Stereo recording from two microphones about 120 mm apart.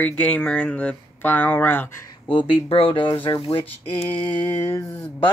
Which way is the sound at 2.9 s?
45° left (ahead or behind).